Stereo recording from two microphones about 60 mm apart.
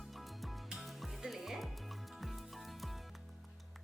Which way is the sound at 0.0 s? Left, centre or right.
Centre.